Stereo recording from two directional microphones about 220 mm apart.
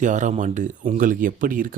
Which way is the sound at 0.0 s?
35° right (ahead or behind).